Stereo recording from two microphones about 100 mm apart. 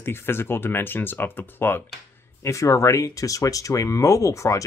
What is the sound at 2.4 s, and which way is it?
Speech, 30° left (ahead or behind).